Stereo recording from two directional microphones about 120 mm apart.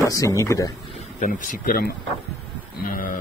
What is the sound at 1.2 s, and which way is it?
Speech, 90° left.